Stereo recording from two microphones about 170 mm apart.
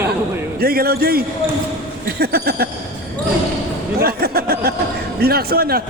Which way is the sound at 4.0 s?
65° right (ahead or behind).